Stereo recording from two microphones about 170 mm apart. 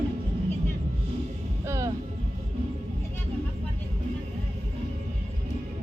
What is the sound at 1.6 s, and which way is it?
Music, 15° right (ahead or behind).